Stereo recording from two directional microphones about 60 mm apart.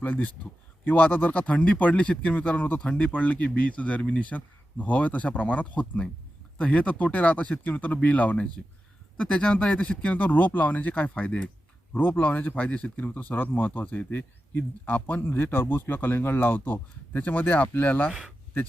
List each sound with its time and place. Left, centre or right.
0.0 s speech: left